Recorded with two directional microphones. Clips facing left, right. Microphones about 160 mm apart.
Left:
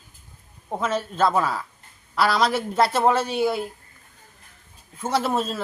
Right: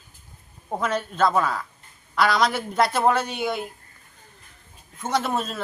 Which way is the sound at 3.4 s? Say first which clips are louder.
Left 4 dB; 5° left (ahead or behind).